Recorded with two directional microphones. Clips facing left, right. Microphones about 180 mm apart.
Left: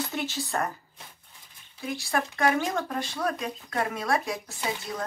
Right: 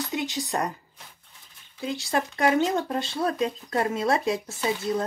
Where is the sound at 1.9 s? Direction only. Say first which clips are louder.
Right 2 dB; 20° right (ahead or behind).